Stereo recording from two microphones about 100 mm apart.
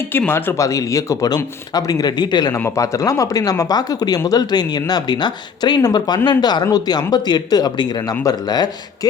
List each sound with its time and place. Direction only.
0.1 s speech: 20° left (ahead or behind); by 2.5 s 45° left (ahead or behind)
2.7 s speech: 30° left (ahead or behind)